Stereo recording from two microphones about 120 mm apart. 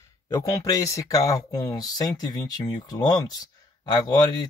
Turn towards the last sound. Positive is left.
turn(degrees=35)  # may be behind; listen again after turning